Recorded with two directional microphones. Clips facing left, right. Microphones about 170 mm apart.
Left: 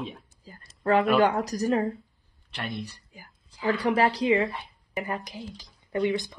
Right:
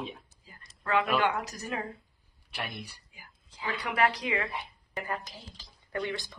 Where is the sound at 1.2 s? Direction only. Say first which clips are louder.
Left 7 dB; 40° left (ahead or behind).